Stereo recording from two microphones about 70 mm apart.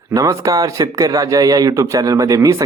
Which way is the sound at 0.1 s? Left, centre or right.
Right.